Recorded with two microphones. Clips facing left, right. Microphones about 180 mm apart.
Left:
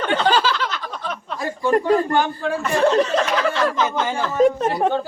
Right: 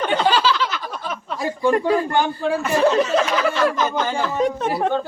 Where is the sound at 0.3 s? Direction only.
50° left (ahead or behind).